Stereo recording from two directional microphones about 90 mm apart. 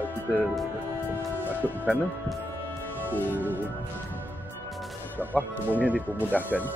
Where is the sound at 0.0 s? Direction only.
20° left (ahead or behind).